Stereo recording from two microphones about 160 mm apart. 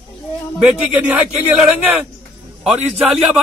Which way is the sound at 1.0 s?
10° right (ahead or behind).